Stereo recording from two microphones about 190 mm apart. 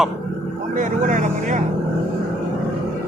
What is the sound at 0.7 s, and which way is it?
Speech, 40° right (ahead or behind).